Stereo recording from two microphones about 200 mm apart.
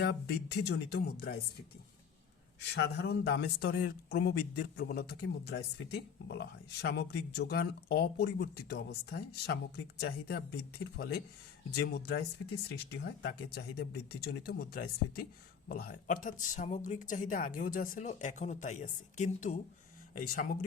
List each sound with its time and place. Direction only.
0.0 s speech: 55° left (ahead or behind)
2.7 s speech: 60° left (ahead or behind); by 20.7 s 45° left (ahead or behind)